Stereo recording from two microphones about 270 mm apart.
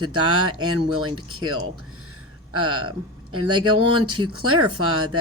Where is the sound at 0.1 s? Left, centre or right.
Right.